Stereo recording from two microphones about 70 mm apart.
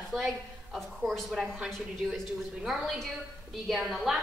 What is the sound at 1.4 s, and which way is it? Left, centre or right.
A woman's voice, centre.